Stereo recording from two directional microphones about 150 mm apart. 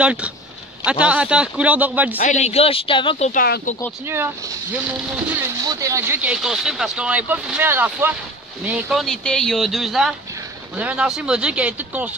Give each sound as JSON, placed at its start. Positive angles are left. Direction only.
{"t": 0.0, "sound": "speech", "side_deg": -10}
{"t": 2.3, "sound": "speech", "side_deg": 45}
{"t": 3.3, "sound": "speech", "side_deg": 80}
{"t": 4.1, "sound": "speech", "side_deg": -15}
{"t": 5.6, "sound": "speech", "side_deg": -25}